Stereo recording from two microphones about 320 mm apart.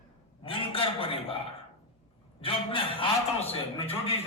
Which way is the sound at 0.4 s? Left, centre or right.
Centre.